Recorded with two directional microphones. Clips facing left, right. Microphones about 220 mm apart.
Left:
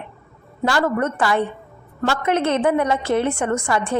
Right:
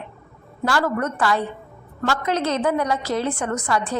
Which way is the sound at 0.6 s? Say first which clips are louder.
Left 2 dB; 25° left (ahead or behind).